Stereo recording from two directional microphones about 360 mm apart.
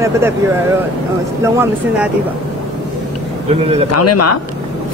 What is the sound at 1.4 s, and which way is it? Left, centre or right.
Speech, centre.